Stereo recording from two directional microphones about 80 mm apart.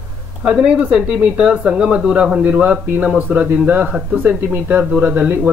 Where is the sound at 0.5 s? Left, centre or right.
Centre.